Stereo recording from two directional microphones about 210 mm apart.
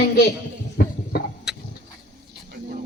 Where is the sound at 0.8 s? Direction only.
50° left (ahead or behind).